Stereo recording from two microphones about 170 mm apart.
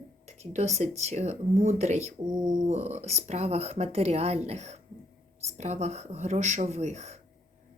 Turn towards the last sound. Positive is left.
turn(degrees=-40)  # may be behind; listen again after turning